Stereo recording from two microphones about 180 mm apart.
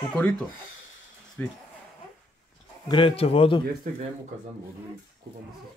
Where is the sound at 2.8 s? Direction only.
30° left (ahead or behind).